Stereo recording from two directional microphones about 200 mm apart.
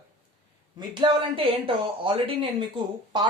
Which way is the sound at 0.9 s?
25° right (ahead or behind).